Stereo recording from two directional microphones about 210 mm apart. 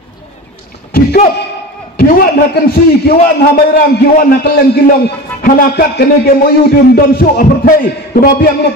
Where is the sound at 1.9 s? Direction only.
45° left (ahead or behind).